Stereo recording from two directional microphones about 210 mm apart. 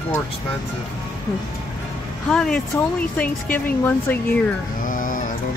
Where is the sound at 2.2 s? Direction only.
5° left (ahead or behind).